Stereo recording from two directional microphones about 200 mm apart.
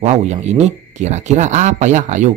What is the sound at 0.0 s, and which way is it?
Speech, 35° right (ahead or behind).